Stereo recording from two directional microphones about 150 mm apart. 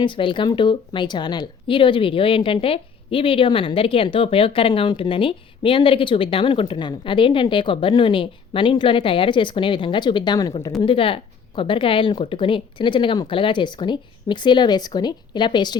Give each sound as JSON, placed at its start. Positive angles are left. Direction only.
{"t": 0.0, "sound": "a woman's voice", "side_deg": 35}